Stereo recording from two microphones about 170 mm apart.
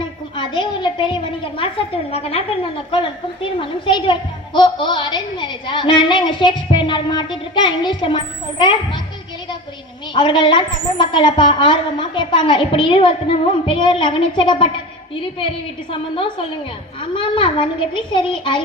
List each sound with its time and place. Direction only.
0.3 s a woman's voice: 30° left (ahead or behind)
10.2 s a woman's voice: 30° left (ahead or behind)